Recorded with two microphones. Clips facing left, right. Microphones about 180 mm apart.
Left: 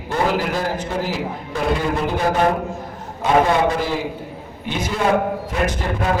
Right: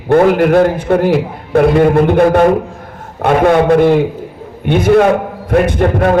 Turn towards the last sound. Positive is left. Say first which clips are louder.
# right 9 dB
turn(degrees=-60)  # may be behind; listen again after turning